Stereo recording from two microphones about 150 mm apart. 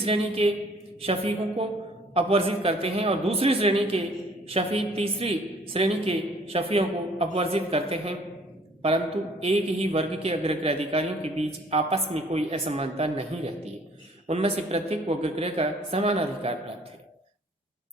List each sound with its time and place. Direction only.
0.0 s a man's voice: 40° right (ahead or behind)
9.4 s a man's voice: 40° right (ahead or behind)